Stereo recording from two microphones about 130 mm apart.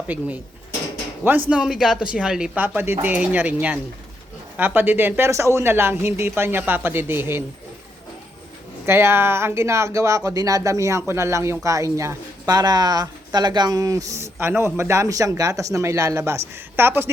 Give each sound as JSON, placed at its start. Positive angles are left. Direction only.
{"t": 1.2, "sound": "speech", "side_deg": -15}
{"t": 8.9, "sound": "a woman's voice", "side_deg": -20}